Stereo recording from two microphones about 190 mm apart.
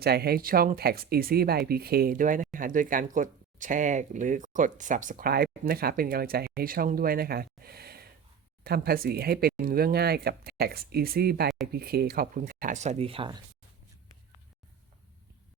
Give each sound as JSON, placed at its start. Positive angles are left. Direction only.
{"t": 0.0, "sound": "speech", "side_deg": -55}